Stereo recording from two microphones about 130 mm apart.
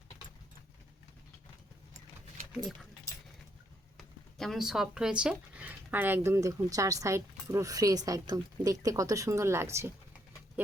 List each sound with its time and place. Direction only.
3.9 s speech: centre (ahead or behind); by 9.9 s 20° right (ahead or behind)